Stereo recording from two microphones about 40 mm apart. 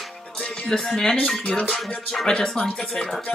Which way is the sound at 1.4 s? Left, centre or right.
Left.